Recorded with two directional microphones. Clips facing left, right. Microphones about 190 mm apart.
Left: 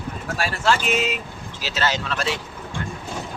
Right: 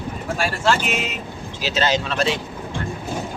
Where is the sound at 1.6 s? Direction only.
20° right (ahead or behind).